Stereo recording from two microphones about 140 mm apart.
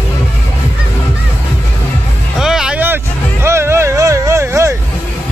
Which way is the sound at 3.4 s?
20° right (ahead or behind).